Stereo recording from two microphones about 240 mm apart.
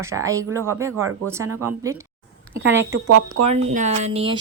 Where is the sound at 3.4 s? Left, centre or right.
Right.